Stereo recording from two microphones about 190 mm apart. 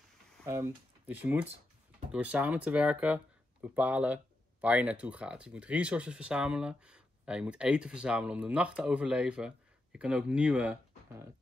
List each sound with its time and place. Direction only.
0.5 s speech: 15° right (ahead or behind)